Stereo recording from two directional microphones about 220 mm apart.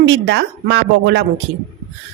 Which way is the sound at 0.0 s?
50° right (ahead or behind).